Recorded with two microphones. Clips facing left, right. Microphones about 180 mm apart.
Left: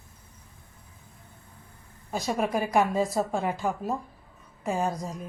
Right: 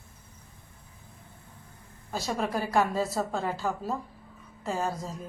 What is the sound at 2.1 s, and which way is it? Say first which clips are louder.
A woman's voice: left 3 dB; 15° left (ahead or behind).